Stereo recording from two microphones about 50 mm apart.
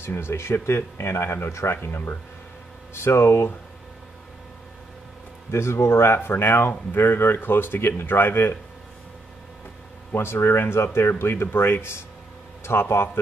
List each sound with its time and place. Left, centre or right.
0.0 s speech: left
5.5 s speech: left
10.1 s speech: left